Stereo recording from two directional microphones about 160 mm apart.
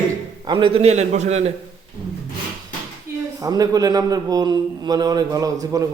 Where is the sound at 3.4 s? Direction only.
20° right (ahead or behind).